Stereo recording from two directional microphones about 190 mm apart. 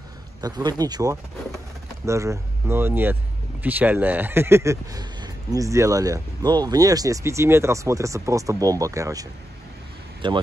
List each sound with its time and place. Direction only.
0.4 s speech: 20° right (ahead or behind)